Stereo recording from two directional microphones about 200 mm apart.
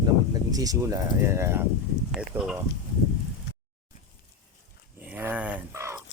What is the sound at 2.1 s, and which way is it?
Speech, centre (ahead or behind).